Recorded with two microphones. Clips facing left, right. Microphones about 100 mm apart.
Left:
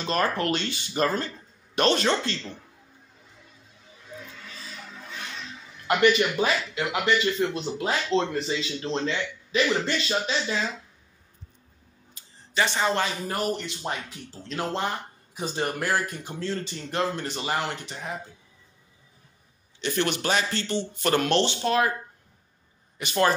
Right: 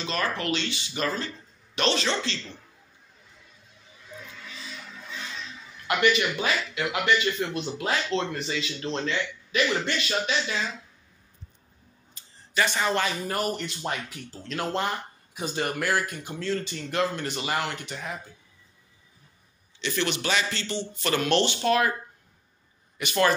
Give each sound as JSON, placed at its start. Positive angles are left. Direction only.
{"t": 0.0, "sound": "speech", "side_deg": 45}
{"t": 4.5, "sound": "music", "side_deg": 40}
{"t": 5.9, "sound": "speech", "side_deg": 35}
{"t": 12.2, "sound": "a sound", "side_deg": 5}
{"t": 12.5, "sound": "speech", "side_deg": 25}
{"t": 15.3, "sound": "speech", "side_deg": 30}
{"t": 19.8, "sound": "speech", "side_deg": 45}
{"t": 21.4, "sound": "speech", "side_deg": 25}
{"t": 22.9, "sound": "speech", "side_deg": 30}